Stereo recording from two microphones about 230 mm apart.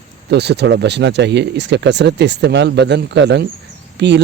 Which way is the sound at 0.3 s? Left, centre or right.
Right.